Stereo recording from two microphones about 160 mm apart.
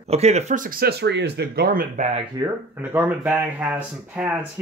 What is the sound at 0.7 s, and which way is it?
Speech, 75° right (ahead or behind).